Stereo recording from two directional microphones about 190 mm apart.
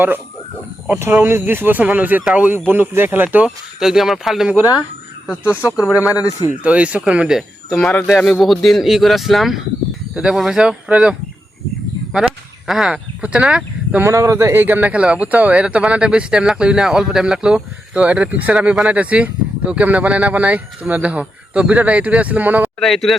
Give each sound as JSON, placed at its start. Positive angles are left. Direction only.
{"t": 0.9, "sound": "speech", "side_deg": -15}
{"t": 6.1, "sound": "a man's voice", "side_deg": 20}
{"t": 6.6, "sound": "speech", "side_deg": -5}
{"t": 12.6, "sound": "speech", "side_deg": 0}
{"t": 14.0, "sound": "speech", "side_deg": -15}